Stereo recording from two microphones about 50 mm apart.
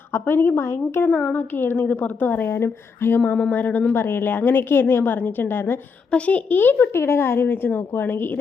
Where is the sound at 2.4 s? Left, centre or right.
Left.